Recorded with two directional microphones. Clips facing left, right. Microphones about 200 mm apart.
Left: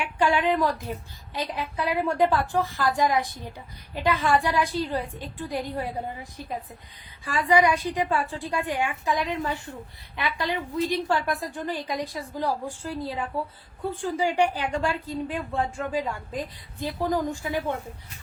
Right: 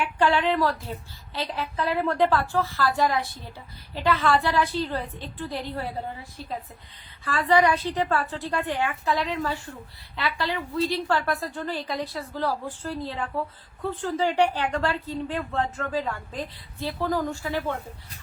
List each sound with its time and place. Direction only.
0.0 s speech: 15° left (ahead or behind)